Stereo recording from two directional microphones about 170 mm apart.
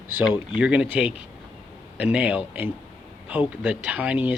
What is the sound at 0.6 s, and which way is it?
Speech, 5° right (ahead or behind).